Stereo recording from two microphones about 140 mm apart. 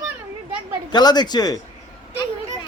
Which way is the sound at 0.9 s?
30° left (ahead or behind).